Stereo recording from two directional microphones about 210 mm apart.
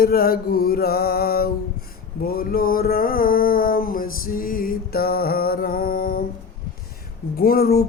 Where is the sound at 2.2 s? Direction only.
45° left (ahead or behind).